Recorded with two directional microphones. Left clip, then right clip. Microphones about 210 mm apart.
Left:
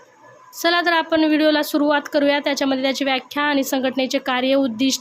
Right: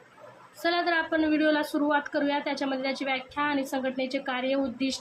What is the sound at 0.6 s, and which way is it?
A woman's voice, 50° left (ahead or behind).